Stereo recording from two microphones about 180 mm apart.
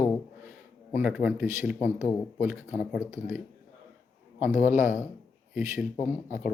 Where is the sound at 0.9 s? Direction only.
10° right (ahead or behind).